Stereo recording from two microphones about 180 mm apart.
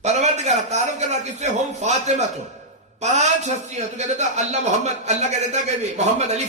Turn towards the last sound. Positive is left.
turn(degrees=-40)  # may be behind; listen again after turning